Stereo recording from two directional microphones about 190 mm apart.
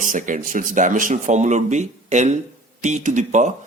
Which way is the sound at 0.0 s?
45° right (ahead or behind).